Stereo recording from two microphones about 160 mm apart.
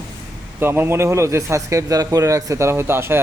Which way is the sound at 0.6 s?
15° right (ahead or behind).